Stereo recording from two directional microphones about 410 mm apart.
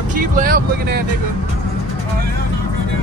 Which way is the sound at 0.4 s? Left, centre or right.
Right.